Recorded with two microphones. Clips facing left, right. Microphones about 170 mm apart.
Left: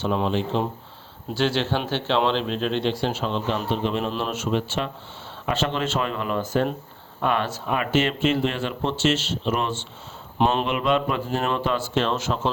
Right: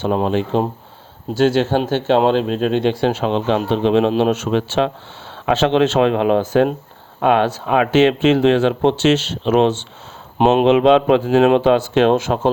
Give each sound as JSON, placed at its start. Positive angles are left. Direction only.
{"t": 0.0, "sound": "speech", "side_deg": -55}
{"t": 4.2, "sound": "speech", "side_deg": -75}
{"t": 5.5, "sound": "speech", "side_deg": -80}